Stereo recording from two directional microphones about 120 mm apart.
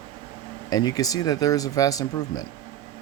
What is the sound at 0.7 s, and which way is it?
Speech, 35° left (ahead or behind).